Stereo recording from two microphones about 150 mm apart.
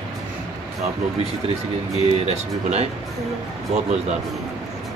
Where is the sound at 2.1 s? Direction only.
45° right (ahead or behind).